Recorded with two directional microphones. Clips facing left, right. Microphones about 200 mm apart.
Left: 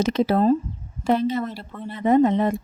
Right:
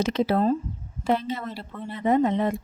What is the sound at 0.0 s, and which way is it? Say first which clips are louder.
Speech: left 3 dB; 45° left (ahead or behind).